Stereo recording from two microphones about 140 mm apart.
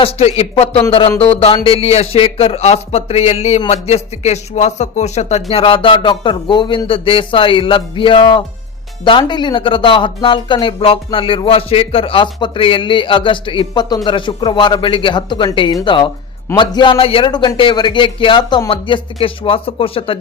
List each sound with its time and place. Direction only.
0.0 s speech: 45° left (ahead or behind)